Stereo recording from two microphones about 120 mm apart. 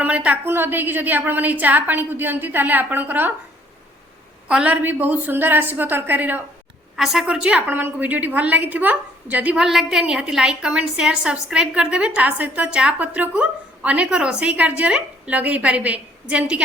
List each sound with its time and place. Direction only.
0.0 s a woman's voice: 10° right (ahead or behind)
4.4 s a woman's voice: 10° right (ahead or behind)
6.9 s a woman's voice: centre (ahead or behind)